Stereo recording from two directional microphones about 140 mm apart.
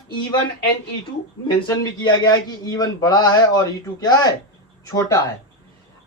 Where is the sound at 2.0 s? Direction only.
30° left (ahead or behind).